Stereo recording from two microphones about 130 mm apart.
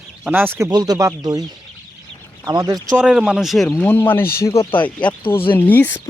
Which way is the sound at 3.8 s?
15° left (ahead or behind).